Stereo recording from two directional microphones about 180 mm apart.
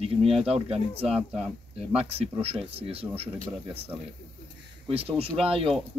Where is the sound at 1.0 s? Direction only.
Centre (ahead or behind).